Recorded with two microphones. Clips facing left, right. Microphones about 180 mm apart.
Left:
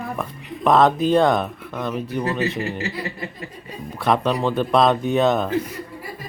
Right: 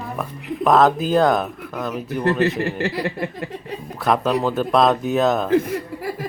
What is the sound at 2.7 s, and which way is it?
Mantra, 60° right (ahead or behind).